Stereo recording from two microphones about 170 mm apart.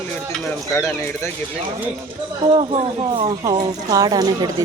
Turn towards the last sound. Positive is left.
turn(degrees=-20)  # may be behind; listen again after turning